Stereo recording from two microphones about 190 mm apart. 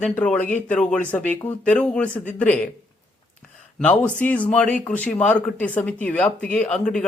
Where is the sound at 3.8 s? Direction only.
5° left (ahead or behind).